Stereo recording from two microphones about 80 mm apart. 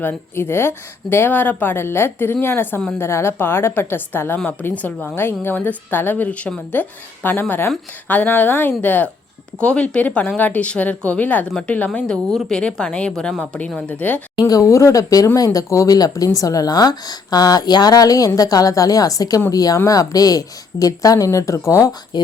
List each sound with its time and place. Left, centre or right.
0.0 s a woman's voice: left
14.3 s speech: left
22.1 s speech: left